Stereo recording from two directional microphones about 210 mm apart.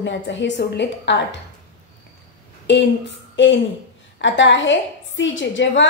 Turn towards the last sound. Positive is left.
turn(degrees=60)  # may be behind; listen again after turning